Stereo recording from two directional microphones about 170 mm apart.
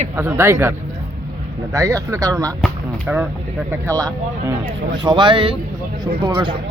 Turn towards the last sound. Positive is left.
turn(degrees=-25)  # may be behind; listen again after turning